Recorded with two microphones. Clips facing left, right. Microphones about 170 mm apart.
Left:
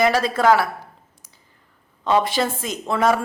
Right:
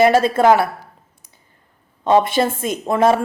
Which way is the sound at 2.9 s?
25° right (ahead or behind).